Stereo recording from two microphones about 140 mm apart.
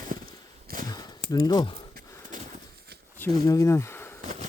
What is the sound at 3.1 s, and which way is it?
Speech, 20° left (ahead or behind).